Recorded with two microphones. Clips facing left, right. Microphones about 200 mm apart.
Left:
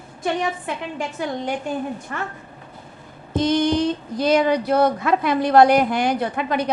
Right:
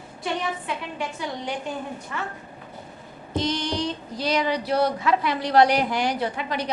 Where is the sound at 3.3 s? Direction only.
50° left (ahead or behind).